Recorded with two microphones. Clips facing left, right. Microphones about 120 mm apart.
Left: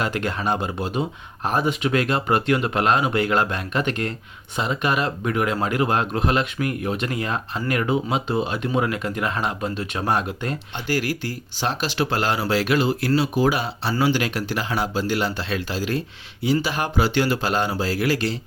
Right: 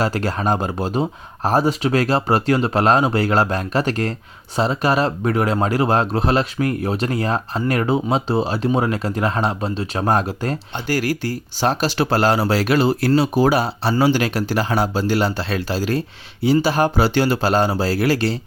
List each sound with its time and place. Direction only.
0.0 s speech: 35° right (ahead or behind)